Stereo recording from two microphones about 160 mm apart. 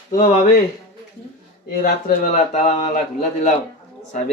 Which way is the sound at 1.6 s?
65° left (ahead or behind).